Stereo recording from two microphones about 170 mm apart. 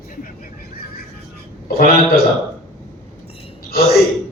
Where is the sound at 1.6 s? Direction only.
60° left (ahead or behind).